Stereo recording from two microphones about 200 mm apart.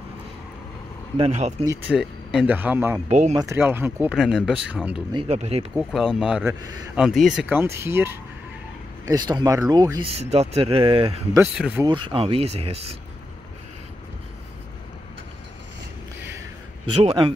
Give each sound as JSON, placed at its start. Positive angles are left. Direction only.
{"t": 1.1, "sound": "speech", "side_deg": -35}
{"t": 1.6, "sound": "speech", "side_deg": -15}
{"t": 3.1, "sound": "speech", "side_deg": -35}
{"t": 3.3, "sound": "speech", "side_deg": -15}
{"t": 5.1, "sound": "speech", "side_deg": -30}
{"t": 5.8, "sound": "speech", "side_deg": 0}
{"t": 6.6, "sound": "speech", "side_deg": -20}
{"t": 7.0, "sound": "speech", "side_deg": 0}
{"t": 11.5, "sound": "speech", "side_deg": -5}
{"t": 11.8, "sound": "speech", "side_deg": -25}
{"t": 16.9, "sound": "speech", "side_deg": -25}